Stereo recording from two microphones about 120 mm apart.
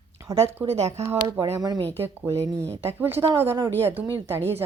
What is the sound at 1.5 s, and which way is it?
Speech, 35° right (ahead or behind).